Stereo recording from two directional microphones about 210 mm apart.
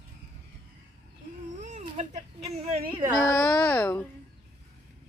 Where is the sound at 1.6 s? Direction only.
35° right (ahead or behind).